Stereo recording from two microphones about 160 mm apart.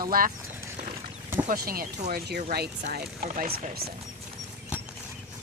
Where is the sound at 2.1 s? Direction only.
90° right.